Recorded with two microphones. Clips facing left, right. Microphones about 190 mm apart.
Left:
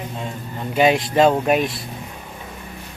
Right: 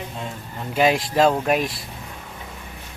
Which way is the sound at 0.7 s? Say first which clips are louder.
Left 2 dB; centre (ahead or behind).